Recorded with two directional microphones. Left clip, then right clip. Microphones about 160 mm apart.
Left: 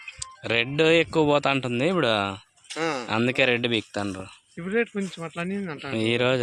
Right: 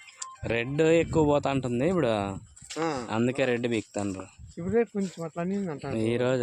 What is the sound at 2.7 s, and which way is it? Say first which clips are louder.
Speech: left 3 dB; 60° right (ahead or behind).